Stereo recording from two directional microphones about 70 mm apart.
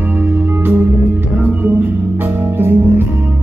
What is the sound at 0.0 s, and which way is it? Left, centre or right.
Music, right.